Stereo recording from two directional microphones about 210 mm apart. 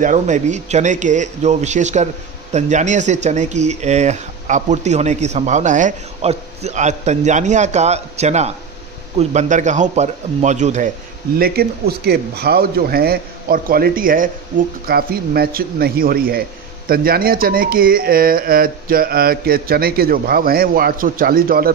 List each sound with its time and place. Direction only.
0.0 s speech: 35° right (ahead or behind)
11.3 s a man's voice: 45° right (ahead or behind)